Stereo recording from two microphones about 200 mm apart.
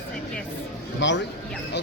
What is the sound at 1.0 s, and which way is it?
Speech, 65° left (ahead or behind).